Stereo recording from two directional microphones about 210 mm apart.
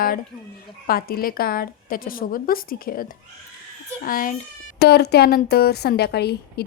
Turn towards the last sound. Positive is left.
turn(degrees=50)  # may be behind; listen again after turning